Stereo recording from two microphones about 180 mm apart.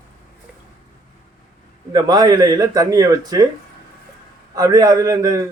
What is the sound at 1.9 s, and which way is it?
Speech, 25° right (ahead or behind).